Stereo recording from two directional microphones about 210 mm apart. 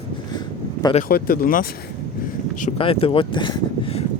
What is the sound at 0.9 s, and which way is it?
Speech, 40° left (ahead or behind).